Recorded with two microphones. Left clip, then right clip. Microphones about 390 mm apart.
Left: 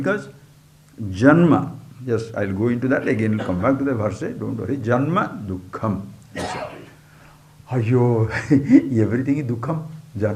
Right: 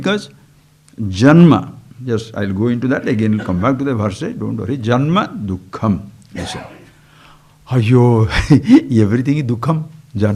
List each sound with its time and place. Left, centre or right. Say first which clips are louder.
0.0 s a man's voice: right 4 dB; right
7.7 s speech: right 6 dB; right